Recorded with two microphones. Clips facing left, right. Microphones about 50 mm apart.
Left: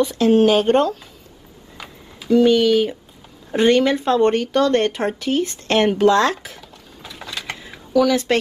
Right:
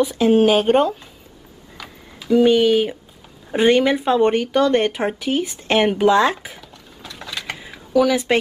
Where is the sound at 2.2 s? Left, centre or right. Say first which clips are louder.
Even; centre.